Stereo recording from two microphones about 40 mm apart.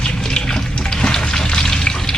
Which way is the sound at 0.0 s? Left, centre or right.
Centre.